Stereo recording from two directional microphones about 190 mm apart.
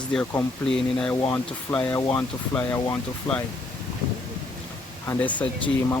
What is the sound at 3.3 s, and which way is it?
Speech, 5° left (ahead or behind).